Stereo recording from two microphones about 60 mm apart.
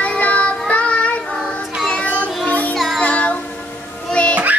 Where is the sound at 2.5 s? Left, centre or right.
Left.